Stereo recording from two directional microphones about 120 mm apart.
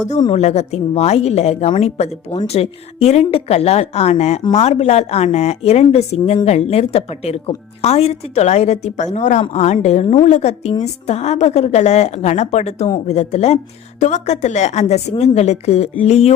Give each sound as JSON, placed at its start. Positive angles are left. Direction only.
{"t": 0.3, "sound": "a woman's voice", "side_deg": 65}
{"t": 9.5, "sound": "a woman's voice", "side_deg": 70}
{"t": 14.0, "sound": "a woman's voice", "side_deg": 75}